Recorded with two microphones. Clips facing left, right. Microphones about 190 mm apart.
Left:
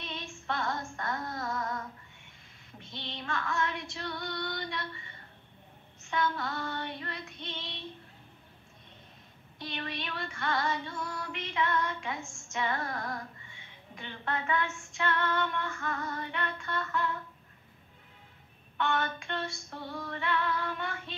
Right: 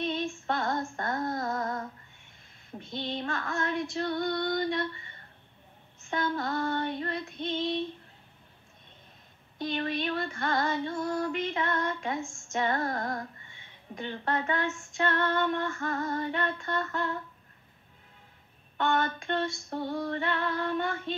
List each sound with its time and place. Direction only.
0.0 s female singing: 45° right (ahead or behind)
2.9 s female singing: 45° right (ahead or behind)
6.0 s female singing: 45° right (ahead or behind)
9.6 s female singing: 45° right (ahead or behind)
18.8 s female singing: 40° right (ahead or behind)